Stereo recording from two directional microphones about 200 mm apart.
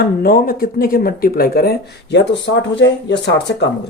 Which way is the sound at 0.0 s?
50° left (ahead or behind).